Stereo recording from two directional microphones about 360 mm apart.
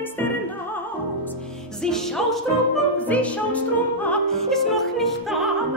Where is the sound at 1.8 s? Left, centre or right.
Centre.